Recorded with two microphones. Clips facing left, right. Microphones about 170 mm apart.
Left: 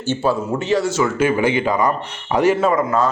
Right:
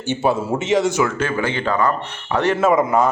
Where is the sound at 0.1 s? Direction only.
20° right (ahead or behind).